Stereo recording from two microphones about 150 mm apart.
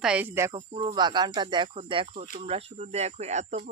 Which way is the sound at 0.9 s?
30° right (ahead or behind).